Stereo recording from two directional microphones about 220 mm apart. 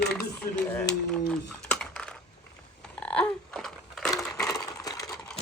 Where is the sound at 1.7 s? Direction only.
5° left (ahead or behind).